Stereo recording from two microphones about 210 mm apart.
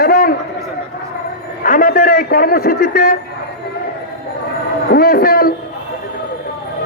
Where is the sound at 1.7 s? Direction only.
40° left (ahead or behind).